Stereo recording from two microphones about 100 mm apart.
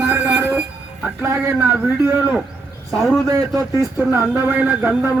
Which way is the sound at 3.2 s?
35° right (ahead or behind).